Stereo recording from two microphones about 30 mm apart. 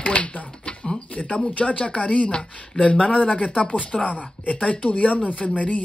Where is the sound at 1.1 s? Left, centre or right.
Left.